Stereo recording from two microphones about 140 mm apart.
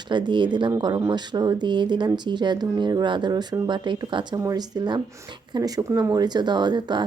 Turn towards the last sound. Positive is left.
turn(degrees=-30)  # may be behind; listen again after turning